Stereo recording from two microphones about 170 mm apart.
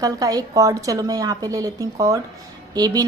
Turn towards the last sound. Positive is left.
turn(degrees=-25)  # may be behind; listen again after turning